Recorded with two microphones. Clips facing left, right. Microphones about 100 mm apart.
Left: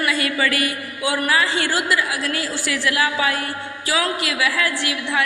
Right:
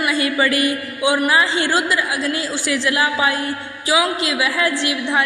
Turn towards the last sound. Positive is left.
turn(degrees=-25)  # may be behind; listen again after turning